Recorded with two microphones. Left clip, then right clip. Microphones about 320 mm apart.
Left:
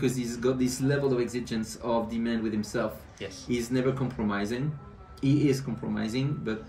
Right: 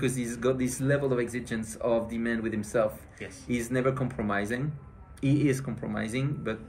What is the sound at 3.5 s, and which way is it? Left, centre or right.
Speech, centre.